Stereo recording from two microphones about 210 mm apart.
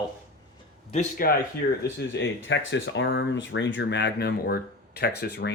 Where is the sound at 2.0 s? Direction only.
60° left (ahead or behind).